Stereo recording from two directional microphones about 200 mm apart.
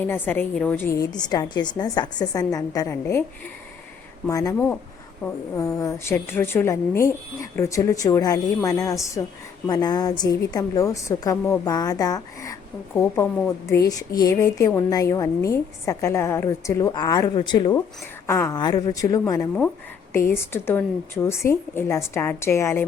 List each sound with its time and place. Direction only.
0.1 s a woman's voice: 10° left (ahead or behind)
4.3 s a woman's voice: 15° left (ahead or behind)
13.7 s a woman's voice: 15° left (ahead or behind)